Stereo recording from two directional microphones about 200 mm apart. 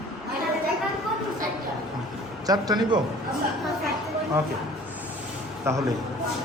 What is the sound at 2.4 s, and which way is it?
Speech, 20° right (ahead or behind).